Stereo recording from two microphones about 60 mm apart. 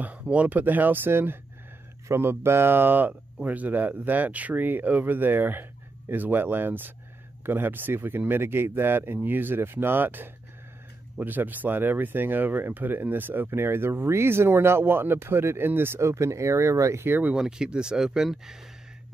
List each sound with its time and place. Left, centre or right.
0.0 s speech: right
16.0 s speech: right
17.4 s speech: centre